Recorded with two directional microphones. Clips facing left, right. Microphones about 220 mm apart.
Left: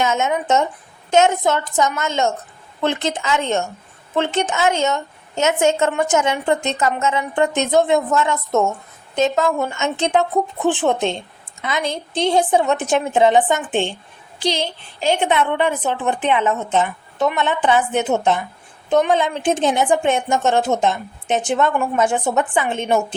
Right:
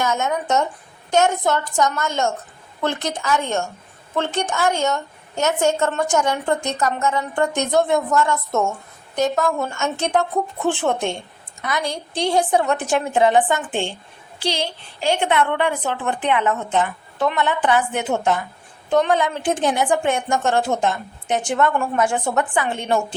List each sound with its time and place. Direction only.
0.0 s a woman's voice: 20° left (ahead or behind)